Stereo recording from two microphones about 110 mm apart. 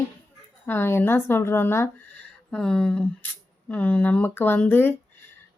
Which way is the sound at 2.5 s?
5° left (ahead or behind).